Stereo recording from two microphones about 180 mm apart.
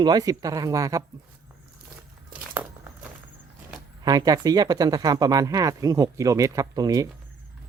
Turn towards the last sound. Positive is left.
turn(degrees=-20)  # may be behind; listen again after turning